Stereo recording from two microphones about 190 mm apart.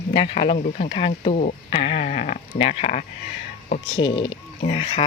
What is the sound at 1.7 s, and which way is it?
Speech, 30° left (ahead or behind).